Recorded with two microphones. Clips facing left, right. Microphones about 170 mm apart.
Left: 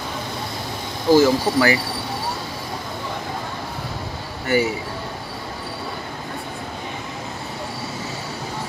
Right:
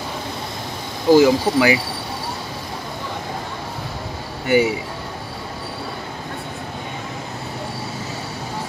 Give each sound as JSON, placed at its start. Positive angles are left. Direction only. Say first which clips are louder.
{"t": 1.1, "sound": "speech", "louder": "right 2 dB", "side_deg": -15}
{"t": 4.5, "sound": "speech", "louder": "right 3 dB", "side_deg": -15}